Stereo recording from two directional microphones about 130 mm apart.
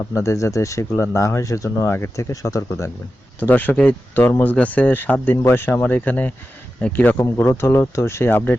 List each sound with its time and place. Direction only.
0.0 s speech: 25° left (ahead or behind)
3.4 s speech: 15° left (ahead or behind)
7.2 s speech: 25° left (ahead or behind)